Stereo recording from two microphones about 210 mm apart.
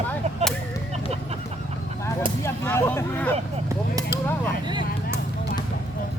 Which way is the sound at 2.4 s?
10° left (ahead or behind).